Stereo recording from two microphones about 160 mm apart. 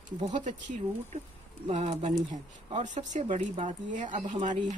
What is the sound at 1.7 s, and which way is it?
Speech, 45° right (ahead or behind).